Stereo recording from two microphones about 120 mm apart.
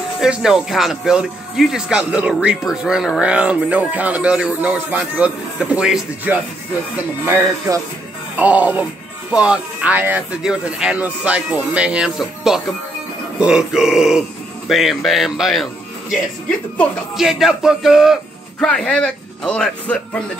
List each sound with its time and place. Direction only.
0.2 s speech: 5° right (ahead or behind)
7.7 s speech: 30° right (ahead or behind)
8.4 s a man's voice: 15° right (ahead or behind); by 20.2 s 10° left (ahead or behind)